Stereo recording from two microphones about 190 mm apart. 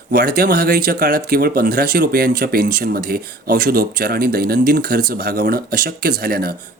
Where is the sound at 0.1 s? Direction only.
55° right (ahead or behind).